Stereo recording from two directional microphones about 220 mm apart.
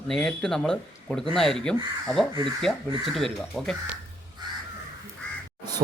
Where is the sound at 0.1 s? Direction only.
5° left (ahead or behind).